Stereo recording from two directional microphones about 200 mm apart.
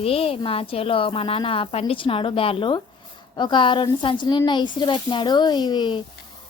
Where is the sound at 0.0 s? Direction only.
30° left (ahead or behind).